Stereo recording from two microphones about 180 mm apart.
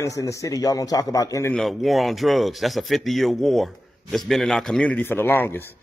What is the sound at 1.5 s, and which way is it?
A man's voice, centre (ahead or behind).